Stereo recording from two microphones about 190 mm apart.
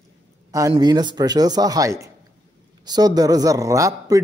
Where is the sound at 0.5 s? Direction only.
15° right (ahead or behind).